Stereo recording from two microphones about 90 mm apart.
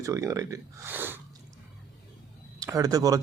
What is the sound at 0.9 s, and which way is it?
Speech, 20° right (ahead or behind).